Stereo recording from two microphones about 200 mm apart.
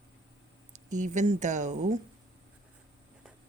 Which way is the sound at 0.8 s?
35° right (ahead or behind).